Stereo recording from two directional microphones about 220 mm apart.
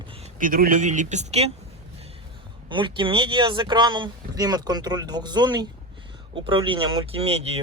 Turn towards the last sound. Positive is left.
turn(degrees=-25)  # may be behind; listen again after turning